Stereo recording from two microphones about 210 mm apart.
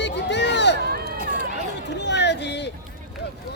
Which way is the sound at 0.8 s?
50° right (ahead or behind).